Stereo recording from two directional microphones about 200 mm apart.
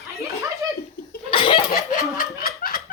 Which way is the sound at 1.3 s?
25° left (ahead or behind).